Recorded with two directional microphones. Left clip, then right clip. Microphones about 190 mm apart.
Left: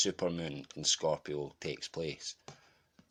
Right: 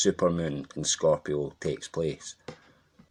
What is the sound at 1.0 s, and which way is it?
Speech, 35° left (ahead or behind).